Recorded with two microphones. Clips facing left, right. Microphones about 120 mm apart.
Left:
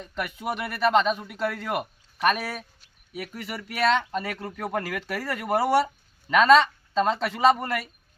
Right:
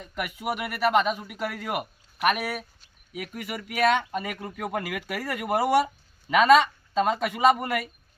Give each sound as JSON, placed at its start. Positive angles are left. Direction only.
{"t": 0.0, "sound": "speech", "side_deg": -10}